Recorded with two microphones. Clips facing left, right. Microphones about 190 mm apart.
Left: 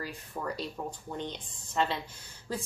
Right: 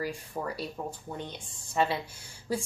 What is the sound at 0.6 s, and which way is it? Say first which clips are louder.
Speech: right 1 dB; 5° right (ahead or behind).